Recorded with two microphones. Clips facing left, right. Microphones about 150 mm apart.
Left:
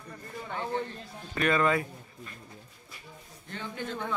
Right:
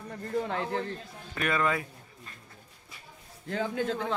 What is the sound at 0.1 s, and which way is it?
Speech, 80° right.